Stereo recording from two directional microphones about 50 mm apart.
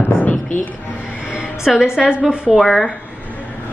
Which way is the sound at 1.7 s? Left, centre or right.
Centre.